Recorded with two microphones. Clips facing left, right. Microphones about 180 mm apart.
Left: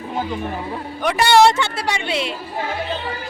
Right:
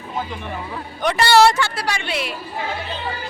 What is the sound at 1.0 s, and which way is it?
A woman's voice, 15° left (ahead or behind).